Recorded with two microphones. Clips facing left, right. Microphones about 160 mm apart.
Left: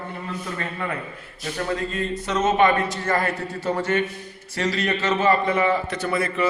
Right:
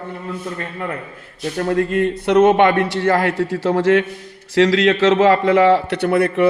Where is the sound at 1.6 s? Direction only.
60° right (ahead or behind).